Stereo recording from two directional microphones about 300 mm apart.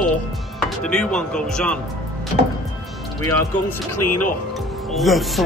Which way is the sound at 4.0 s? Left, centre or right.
Left.